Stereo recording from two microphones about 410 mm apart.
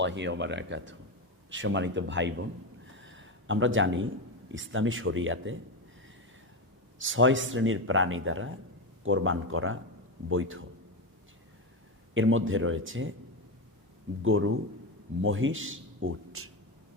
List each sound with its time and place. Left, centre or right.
0.0 s speech: right
3.0 s a sound: right
4.4 s speech: right
7.0 s speech: right
12.1 s speech: right
14.2 s speech: right